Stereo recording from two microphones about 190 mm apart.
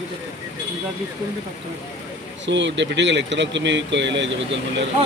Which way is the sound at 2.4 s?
70° right (ahead or behind).